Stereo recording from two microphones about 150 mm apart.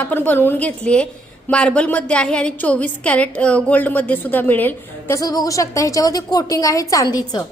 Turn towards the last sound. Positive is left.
turn(degrees=25)  # may be behind; listen again after turning